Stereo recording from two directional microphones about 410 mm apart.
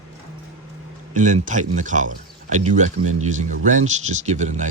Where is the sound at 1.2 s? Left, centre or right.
Centre.